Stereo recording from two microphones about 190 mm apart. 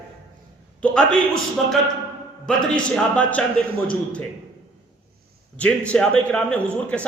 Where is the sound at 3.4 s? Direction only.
5° left (ahead or behind).